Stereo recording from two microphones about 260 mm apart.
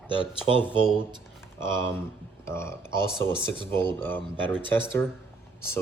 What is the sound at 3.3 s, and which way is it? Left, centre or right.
Speech, centre.